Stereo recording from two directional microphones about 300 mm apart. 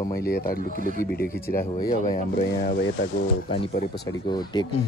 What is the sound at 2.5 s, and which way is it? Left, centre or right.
Speech, left.